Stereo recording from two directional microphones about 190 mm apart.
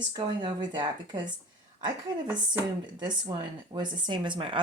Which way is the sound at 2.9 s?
25° right (ahead or behind).